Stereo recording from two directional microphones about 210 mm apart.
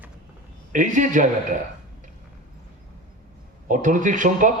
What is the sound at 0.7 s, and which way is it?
Speech, 35° right (ahead or behind).